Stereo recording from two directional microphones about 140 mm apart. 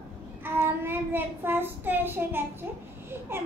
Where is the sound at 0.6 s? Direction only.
15° right (ahead or behind).